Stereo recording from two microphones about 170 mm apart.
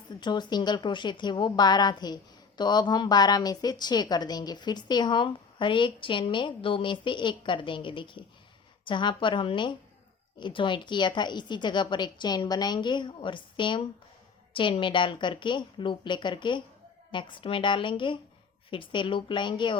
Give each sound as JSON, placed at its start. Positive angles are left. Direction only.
{"t": 0.2, "sound": "a woman's voice", "side_deg": 25}